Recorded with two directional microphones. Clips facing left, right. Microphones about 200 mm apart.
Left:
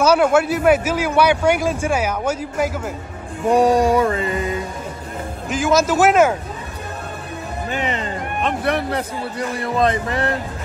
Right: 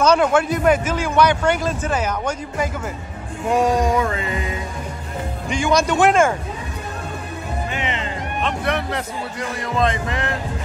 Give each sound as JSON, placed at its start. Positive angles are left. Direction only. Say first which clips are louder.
{"t": 0.0, "sound": "a man's voice", "louder": "left 1 dB", "side_deg": 5}
{"t": 3.5, "sound": "speech", "louder": "left 3 dB", "side_deg": 35}
{"t": 5.5, "sound": "a man's voice", "louder": "left 2 dB", "side_deg": 0}
{"t": 7.7, "sound": "speech", "louder": "left 6 dB", "side_deg": 40}